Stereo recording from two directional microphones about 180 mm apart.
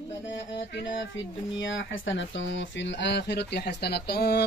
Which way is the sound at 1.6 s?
90° left.